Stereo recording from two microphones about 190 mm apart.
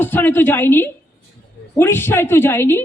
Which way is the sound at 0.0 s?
10° left (ahead or behind).